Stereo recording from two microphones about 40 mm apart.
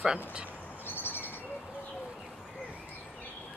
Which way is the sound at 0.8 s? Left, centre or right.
Left.